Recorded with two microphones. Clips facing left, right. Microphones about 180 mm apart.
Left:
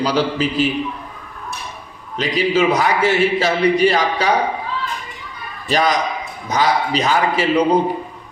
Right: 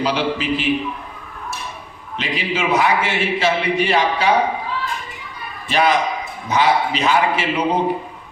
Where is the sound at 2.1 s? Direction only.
40° left (ahead or behind).